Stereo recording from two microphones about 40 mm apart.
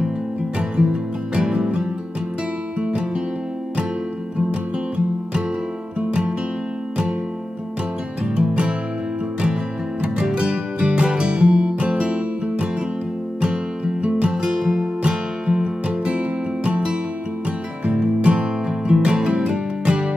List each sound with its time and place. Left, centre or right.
0.6 s music: right
4.5 s music: right
8.2 s music: right
10.2 s music: right
18.2 s music: right